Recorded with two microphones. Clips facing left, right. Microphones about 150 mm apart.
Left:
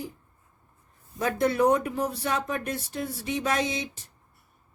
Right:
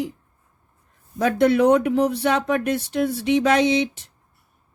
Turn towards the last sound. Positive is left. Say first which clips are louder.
# right 10 dB
turn(degrees=-85)